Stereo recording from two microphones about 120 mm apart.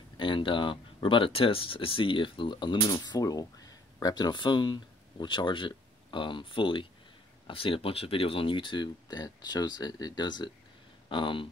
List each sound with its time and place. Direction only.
0.2 s speech: 45° left (ahead or behind)